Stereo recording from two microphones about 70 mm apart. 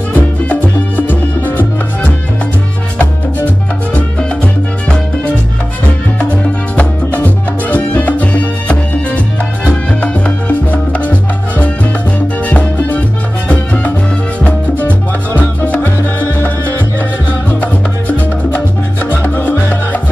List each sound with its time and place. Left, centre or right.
0.1 s music: left
3.0 s salsa music: left
6.7 s salsa music: left
10.0 s music: centre
11.1 s salsa music: left
12.4 s music: left
14.4 s music: left